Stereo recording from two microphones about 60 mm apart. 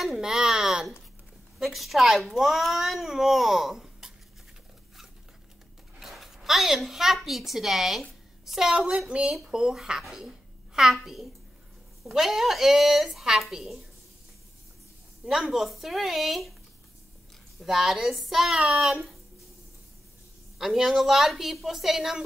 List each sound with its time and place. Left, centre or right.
0.0 s a child's voice: centre
5.9 s a sound: centre
7.2 s a child's voice: centre
15.2 s a child's voice: centre
17.6 s a child's voice: centre
18.6 s a woman's voice: centre
18.9 s a child's voice: centre
20.5 s a child's voice: centre